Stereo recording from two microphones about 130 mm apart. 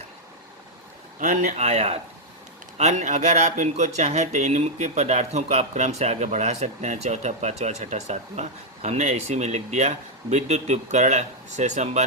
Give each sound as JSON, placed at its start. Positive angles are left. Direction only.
{"t": 1.2, "sound": "speech", "side_deg": -80}
{"t": 1.5, "sound": "speech", "side_deg": -55}